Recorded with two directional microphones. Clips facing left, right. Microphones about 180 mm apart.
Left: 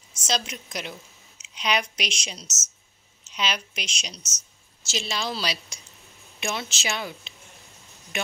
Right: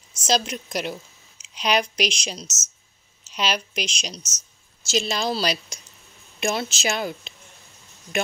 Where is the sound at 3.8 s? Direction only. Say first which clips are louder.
Right 6 dB; 35° right (ahead or behind).